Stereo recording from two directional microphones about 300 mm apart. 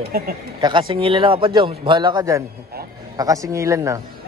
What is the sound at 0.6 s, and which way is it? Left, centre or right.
A man's voice, centre.